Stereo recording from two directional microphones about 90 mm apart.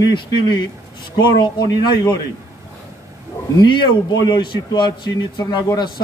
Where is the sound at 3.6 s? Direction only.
50° left (ahead or behind).